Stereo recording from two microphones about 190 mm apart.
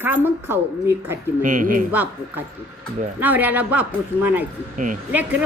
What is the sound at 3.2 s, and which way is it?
Speech, 10° right (ahead or behind).